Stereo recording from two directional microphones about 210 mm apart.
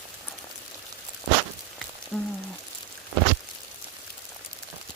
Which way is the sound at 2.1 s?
5° left (ahead or behind).